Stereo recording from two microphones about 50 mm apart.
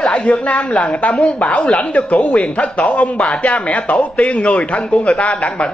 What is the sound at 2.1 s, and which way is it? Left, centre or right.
A man's voice, left.